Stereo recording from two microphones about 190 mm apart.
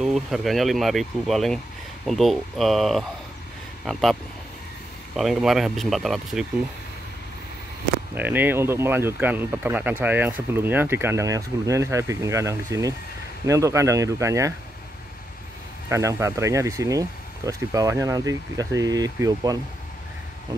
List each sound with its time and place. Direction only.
0.0 s speech: centre (ahead or behind)
8.1 s speech: 10° right (ahead or behind)
15.9 s speech: 15° right (ahead or behind)